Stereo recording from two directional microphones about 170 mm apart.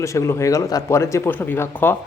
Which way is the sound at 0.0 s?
15° left (ahead or behind).